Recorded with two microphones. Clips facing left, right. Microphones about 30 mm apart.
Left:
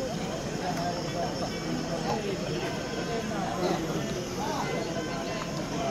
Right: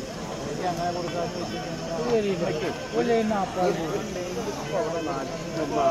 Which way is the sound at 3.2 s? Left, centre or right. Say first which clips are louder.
Right 7 dB; right.